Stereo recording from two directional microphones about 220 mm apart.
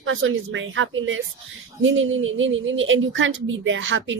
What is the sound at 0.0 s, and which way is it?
A woman's voice, 60° right (ahead or behind).